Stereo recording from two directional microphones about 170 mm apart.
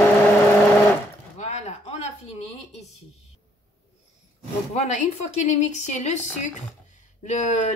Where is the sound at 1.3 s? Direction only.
45° left (ahead or behind).